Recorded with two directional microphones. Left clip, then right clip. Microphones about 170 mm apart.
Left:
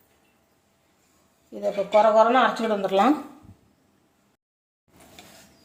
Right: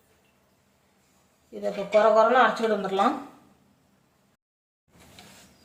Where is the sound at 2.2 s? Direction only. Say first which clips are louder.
Left 1 dB; 30° left (ahead or behind).